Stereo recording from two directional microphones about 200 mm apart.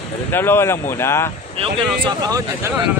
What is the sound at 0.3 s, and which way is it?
Speech, 10° left (ahead or behind).